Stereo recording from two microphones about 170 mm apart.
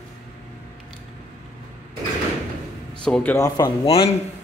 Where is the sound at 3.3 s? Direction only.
20° left (ahead or behind).